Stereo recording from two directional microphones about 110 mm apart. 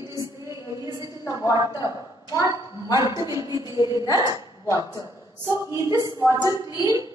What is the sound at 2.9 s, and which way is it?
A woman's voice, 30° right (ahead or behind).